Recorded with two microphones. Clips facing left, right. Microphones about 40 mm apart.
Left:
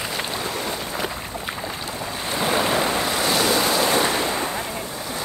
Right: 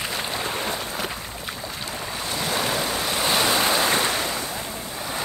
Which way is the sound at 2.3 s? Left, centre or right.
Left.